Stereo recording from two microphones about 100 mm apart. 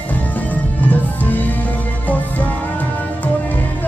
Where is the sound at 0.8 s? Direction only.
15° left (ahead or behind).